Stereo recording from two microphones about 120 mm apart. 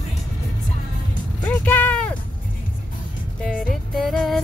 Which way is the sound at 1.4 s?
10° left (ahead or behind).